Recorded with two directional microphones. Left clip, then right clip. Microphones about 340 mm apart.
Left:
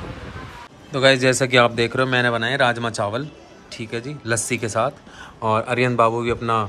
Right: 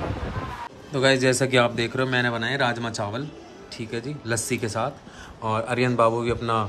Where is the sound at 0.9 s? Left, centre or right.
Centre.